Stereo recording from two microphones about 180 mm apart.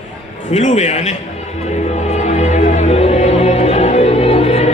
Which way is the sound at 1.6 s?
40° left (ahead or behind).